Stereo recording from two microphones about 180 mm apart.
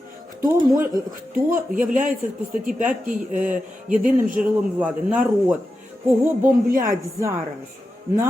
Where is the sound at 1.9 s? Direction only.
45° right (ahead or behind).